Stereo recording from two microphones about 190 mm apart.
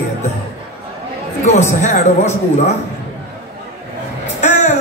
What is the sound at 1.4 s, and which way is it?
Speech, 35° left (ahead or behind).